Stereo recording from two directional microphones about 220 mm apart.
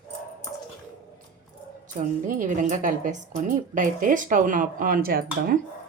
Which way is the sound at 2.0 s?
35° right (ahead or behind).